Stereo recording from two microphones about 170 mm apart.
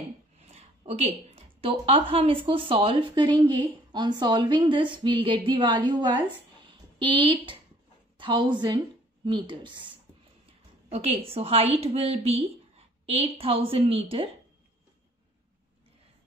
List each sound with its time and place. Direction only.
0.4 s a woman's voice: 40° right (ahead or behind)
6.6 s a sound: 30° right (ahead or behind)
8.2 s speech: 30° right (ahead or behind)
10.9 s a woman's voice: 35° right (ahead or behind)